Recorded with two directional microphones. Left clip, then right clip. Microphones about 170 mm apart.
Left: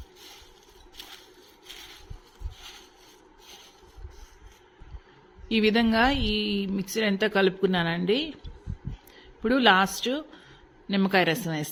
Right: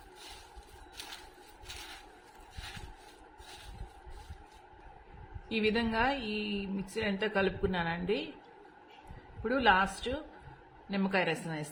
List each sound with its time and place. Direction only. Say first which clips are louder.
5.5 s speech: left 8 dB; 55° left (ahead or behind)
9.4 s speech: left 6 dB; 55° left (ahead or behind)